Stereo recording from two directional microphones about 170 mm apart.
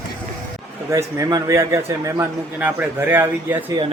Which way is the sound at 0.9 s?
20° right (ahead or behind).